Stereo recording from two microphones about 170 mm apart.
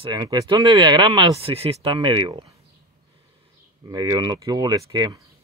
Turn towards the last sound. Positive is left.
turn(degrees=-20)  # may be behind; listen again after turning